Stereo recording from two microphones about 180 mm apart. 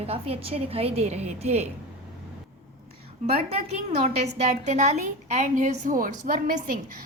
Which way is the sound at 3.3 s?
35° right (ahead or behind).